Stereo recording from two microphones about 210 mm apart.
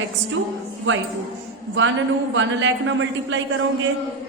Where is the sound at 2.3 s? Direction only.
60° right (ahead or behind).